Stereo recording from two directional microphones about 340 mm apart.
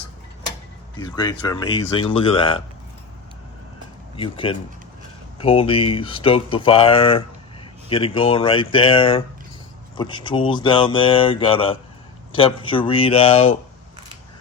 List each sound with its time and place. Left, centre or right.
1.0 s speech: centre
4.2 s speech: centre